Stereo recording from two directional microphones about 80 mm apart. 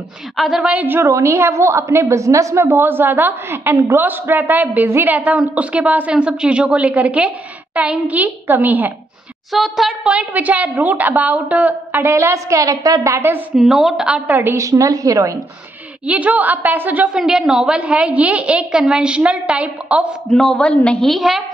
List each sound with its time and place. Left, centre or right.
0.4 s speech: centre
0.7 s a woman's voice: right
1.0 s a woman's voice: right
2.6 s a woman's voice: right
4.0 s a woman's voice: right
9.5 s speech: centre
10.1 s a woman's voice: centre; by 13.2 s right
13.6 s a woman's voice: centre
14.3 s a woman's voice: right
14.6 s a woman's voice: right
16.1 s a woman's voice: centre
17.2 s a woman's voice: centre
20.2 s a woman's voice: centre
21.1 s speech: centre